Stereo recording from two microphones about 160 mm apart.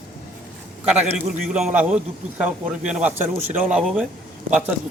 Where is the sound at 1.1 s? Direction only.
5° right (ahead or behind).